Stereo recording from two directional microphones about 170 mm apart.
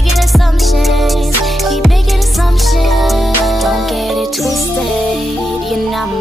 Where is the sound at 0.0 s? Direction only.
Centre (ahead or behind).